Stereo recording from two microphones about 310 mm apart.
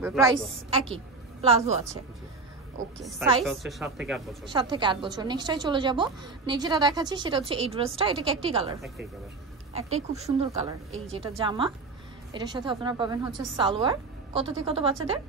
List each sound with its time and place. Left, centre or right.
0.0 s a woman's voice: centre
3.4 s speech: centre
4.5 s a woman's voice: centre
10.1 s a woman's voice: centre